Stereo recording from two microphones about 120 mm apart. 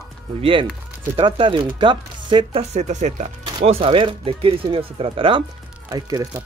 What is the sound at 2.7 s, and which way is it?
Speech, 75° right (ahead or behind).